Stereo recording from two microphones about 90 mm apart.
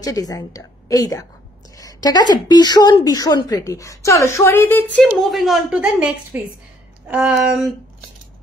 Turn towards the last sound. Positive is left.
turn(degrees=-5)  # may be behind; listen again after turning